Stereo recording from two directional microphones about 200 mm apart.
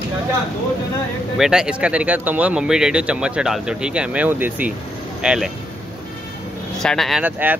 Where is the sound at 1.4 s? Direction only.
5° right (ahead or behind).